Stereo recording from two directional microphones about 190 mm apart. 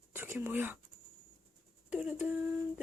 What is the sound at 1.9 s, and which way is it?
Speech, 5° right (ahead or behind).